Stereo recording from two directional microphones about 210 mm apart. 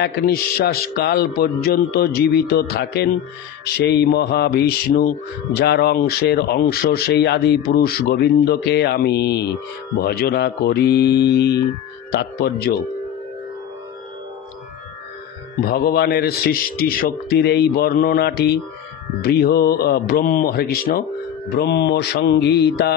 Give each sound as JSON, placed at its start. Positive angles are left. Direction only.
{"t": 0.0, "sound": "speech", "side_deg": 45}
{"t": 15.6, "sound": "speech", "side_deg": 45}